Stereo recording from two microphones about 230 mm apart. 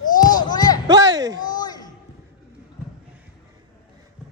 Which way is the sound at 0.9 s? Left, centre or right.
Centre.